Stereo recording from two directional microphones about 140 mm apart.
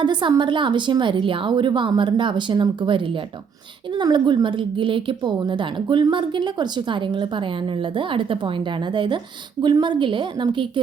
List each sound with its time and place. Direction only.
0.0 s a woman's voice: 35° right (ahead or behind)